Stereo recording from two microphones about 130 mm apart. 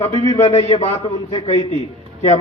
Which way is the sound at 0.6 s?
50° left (ahead or behind).